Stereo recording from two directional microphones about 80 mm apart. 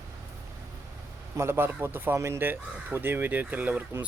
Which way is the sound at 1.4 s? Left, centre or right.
Right.